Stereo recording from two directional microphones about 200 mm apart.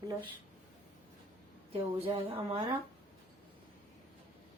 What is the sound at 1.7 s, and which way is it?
Speech, 30° right (ahead or behind).